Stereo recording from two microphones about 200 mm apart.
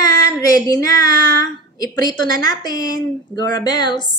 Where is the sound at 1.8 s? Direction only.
20° left (ahead or behind).